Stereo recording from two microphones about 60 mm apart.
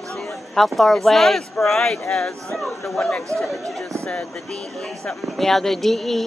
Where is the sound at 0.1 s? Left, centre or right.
Centre.